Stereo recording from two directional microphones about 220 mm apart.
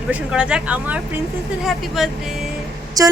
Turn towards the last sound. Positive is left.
turn(degrees=-15)  # may be behind; listen again after turning